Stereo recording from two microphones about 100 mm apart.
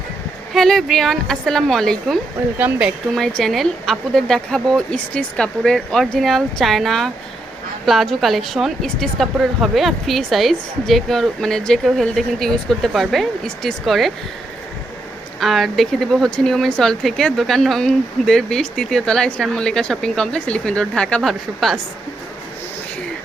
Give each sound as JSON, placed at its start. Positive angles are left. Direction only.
{"t": 0.5, "sound": "speech", "side_deg": 0}
{"t": 2.6, "sound": "speech", "side_deg": -15}
{"t": 3.2, "sound": "speech", "side_deg": 5}
{"t": 15.4, "sound": "speech", "side_deg": 0}